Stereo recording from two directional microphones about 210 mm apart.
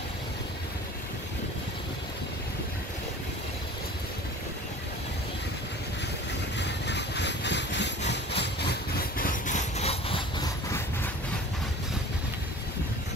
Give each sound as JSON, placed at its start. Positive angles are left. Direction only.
{"t": 6.6, "sound": "vehicle", "side_deg": 55}
{"t": 8.1, "sound": "engine", "side_deg": 55}